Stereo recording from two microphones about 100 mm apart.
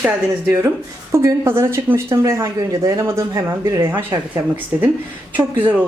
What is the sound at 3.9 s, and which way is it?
Speech, 20° right (ahead or behind).